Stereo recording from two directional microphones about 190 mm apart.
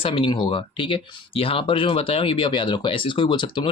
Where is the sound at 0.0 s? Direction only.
25° left (ahead or behind).